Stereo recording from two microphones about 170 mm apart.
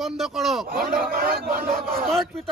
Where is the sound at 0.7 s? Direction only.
60° right (ahead or behind).